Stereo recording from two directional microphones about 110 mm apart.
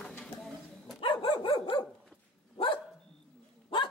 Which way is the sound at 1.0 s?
50° left (ahead or behind).